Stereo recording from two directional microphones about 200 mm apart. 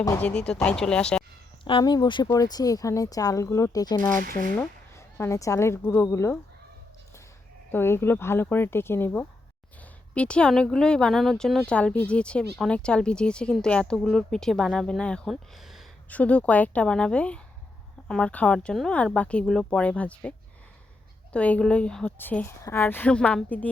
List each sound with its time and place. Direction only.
0.0 s speech: 15° left (ahead or behind)
0.3 s speech: 5° left (ahead or behind)
1.6 s speech: 20° left (ahead or behind)
4.3 s speech: 45° right (ahead or behind)
4.5 s a woman's voice: 10° left (ahead or behind)
7.7 s speech: 10° left (ahead or behind)
21.3 s speech: 5° left (ahead or behind)